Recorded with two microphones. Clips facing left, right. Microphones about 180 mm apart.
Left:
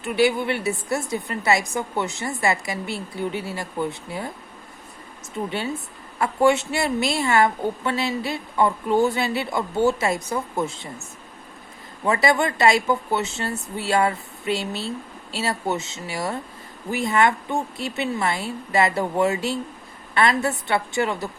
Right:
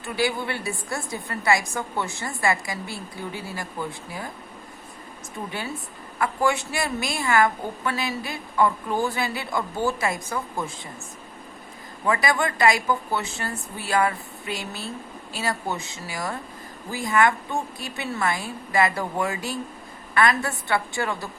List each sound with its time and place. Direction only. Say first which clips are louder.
0.0 s a woman's voice: left 5 dB; 20° left (ahead or behind)
6.1 s a woman's voice: left 5 dB; 25° left (ahead or behind)
12.0 s a woman's voice: left 3 dB; 25° left (ahead or behind)